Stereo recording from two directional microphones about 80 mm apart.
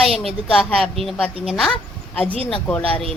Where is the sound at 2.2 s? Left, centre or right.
Centre.